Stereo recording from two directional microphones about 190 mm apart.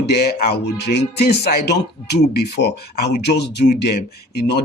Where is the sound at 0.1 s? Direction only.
55° left (ahead or behind).